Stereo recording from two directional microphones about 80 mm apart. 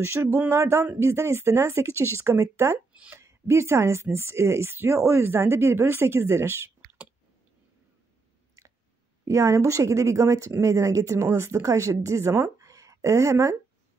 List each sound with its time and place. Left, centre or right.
0.0 s speech: right
9.2 s speech: right